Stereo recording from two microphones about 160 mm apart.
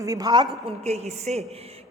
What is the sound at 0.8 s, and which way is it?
Speech, 45° right (ahead or behind).